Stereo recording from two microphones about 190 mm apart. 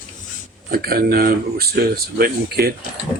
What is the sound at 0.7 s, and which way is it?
Speech, 50° right (ahead or behind).